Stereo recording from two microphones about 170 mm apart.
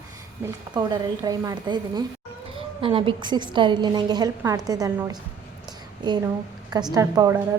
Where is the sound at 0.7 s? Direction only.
25° right (ahead or behind).